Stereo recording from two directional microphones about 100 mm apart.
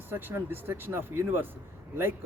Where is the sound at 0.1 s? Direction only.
20° right (ahead or behind).